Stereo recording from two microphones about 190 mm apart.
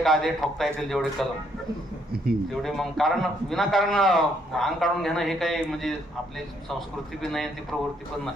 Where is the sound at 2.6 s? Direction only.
Centre (ahead or behind).